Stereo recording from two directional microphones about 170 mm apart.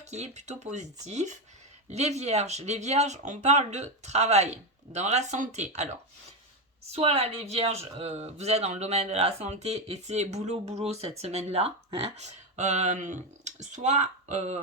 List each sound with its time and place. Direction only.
0.0 s speech: 40° right (ahead or behind)